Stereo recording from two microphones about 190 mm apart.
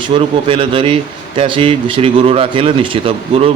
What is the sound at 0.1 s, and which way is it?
Speech, 30° right (ahead or behind).